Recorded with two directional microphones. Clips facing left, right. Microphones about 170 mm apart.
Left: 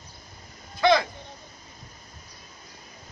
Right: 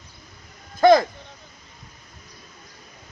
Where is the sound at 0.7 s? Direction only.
45° right (ahead or behind).